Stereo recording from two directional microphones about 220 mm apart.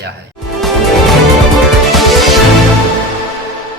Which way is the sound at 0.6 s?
Centre (ahead or behind).